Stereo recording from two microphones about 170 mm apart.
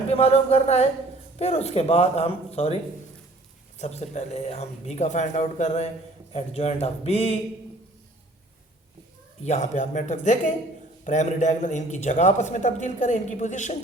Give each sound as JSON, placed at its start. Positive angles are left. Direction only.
{"t": 0.1, "sound": "speech", "side_deg": 35}
{"t": 3.8, "sound": "speech", "side_deg": 40}
{"t": 9.4, "sound": "a man's voice", "side_deg": 40}